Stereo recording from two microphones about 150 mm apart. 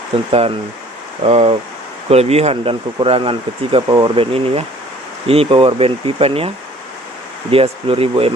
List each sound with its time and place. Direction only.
0.3 s speech: 40° right (ahead or behind)
7.5 s speech: 40° right (ahead or behind)